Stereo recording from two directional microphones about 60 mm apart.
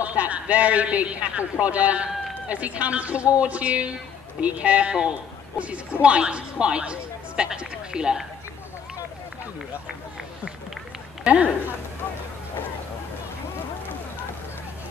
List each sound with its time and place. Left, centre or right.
0.0 s a man's voice: right
11.2 s a man's voice: centre